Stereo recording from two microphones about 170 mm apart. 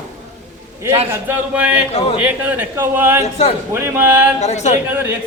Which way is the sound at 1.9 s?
35° left (ahead or behind).